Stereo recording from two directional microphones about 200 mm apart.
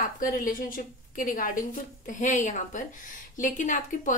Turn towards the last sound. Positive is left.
turn(degrees=40)  # may be behind; listen again after turning